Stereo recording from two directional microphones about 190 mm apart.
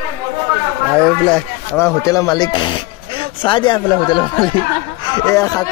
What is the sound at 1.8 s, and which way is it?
Speech, 15° left (ahead or behind).